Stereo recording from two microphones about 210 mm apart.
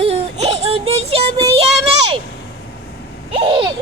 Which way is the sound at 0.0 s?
30° right (ahead or behind).